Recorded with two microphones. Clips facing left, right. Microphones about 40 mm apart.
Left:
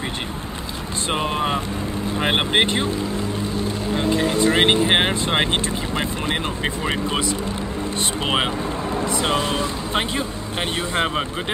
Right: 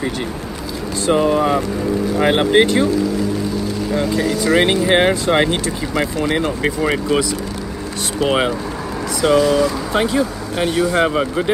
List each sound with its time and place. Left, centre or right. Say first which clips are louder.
1.0 s speech: right 8 dB; left
9.2 s speech: right 12 dB; left
11.1 s speech: right 7 dB; centre